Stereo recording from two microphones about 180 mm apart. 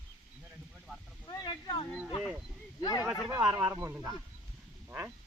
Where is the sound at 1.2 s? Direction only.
25° left (ahead or behind).